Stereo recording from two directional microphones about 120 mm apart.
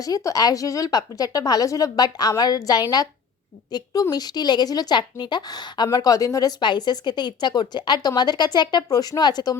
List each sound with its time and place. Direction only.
0.0 s a woman's voice: 30° left (ahead or behind)
6.6 s a woman's voice: 40° left (ahead or behind)